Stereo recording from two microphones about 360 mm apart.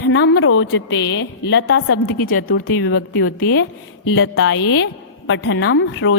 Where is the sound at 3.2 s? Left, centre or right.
Left.